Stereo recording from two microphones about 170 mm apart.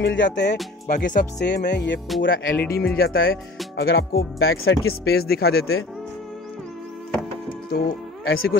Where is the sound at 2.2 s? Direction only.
60° left (ahead or behind).